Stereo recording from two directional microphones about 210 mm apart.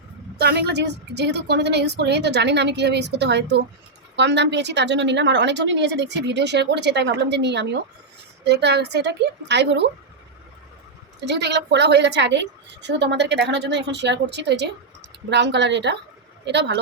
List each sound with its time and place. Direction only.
0.3 s a woman's voice: 50° right (ahead or behind)
11.2 s a woman's voice: 55° right (ahead or behind)